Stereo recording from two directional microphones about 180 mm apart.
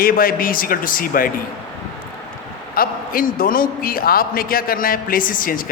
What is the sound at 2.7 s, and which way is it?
A man's voice, 55° left (ahead or behind).